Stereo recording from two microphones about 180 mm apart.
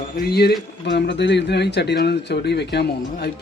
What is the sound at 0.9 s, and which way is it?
Speech, 70° left (ahead or behind).